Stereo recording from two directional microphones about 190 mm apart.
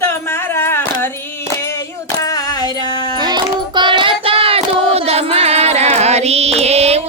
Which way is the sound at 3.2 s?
25° right (ahead or behind).